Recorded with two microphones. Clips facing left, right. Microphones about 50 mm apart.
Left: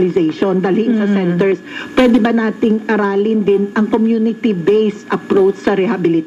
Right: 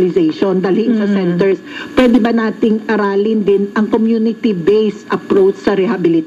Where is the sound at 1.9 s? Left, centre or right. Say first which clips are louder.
Right 1 dB; centre.